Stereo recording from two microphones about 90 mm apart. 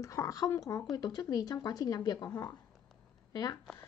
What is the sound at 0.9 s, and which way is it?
Speech, 45° left (ahead or behind).